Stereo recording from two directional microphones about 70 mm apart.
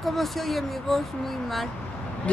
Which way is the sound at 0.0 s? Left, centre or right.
Centre.